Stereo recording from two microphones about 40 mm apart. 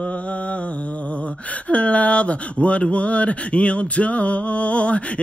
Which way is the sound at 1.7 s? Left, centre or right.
Left.